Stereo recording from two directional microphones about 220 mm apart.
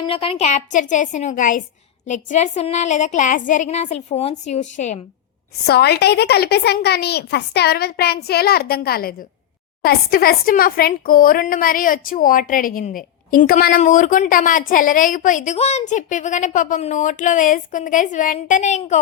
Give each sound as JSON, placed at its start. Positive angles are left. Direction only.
{"t": 0.0, "sound": "speech", "side_deg": 25}
{"t": 5.6, "sound": "a woman's voice", "side_deg": 45}